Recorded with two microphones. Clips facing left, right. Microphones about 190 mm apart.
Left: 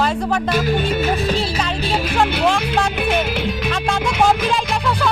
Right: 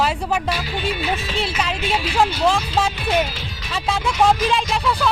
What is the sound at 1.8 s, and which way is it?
Speech, 40° left (ahead or behind).